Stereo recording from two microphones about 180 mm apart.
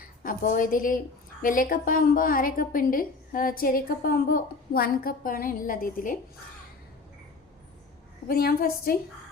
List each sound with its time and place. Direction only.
0.2 s a woman's voice: 45° left (ahead or behind)
8.3 s a woman's voice: 55° left (ahead or behind)